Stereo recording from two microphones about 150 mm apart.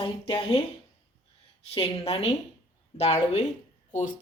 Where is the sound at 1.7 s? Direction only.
40° left (ahead or behind).